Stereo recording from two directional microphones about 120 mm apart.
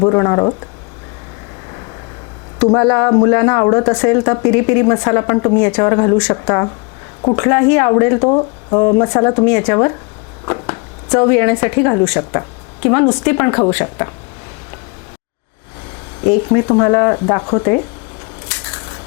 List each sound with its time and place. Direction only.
0.0 s speech: 25° left (ahead or behind)
2.6 s speech: 25° left (ahead or behind)
16.2 s speech: 20° left (ahead or behind)
18.6 s crushing: 20° left (ahead or behind)